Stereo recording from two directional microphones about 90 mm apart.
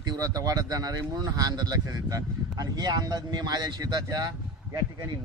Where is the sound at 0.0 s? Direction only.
45° right (ahead or behind).